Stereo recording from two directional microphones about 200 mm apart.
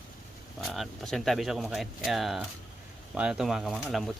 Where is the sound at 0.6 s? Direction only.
Centre (ahead or behind).